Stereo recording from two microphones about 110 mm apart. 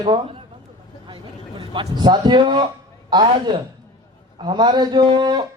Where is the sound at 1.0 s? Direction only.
50° right (ahead or behind).